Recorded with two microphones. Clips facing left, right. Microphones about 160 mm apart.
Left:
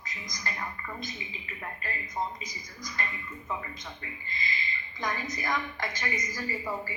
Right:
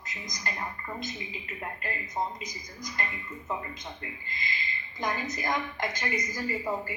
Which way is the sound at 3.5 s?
20° right (ahead or behind).